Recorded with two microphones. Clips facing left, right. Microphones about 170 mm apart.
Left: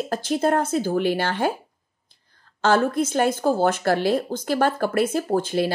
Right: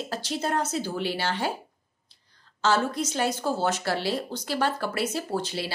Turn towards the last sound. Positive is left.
turn(degrees=50)  # may be behind; listen again after turning